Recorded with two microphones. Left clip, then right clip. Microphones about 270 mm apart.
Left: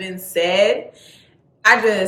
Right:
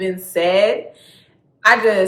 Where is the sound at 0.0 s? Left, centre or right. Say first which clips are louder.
Right 2 dB; centre.